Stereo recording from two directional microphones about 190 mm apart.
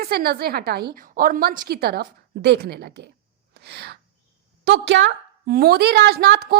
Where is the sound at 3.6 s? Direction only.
60° right (ahead or behind).